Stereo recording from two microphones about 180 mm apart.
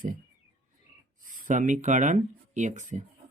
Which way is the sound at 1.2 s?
50° right (ahead or behind).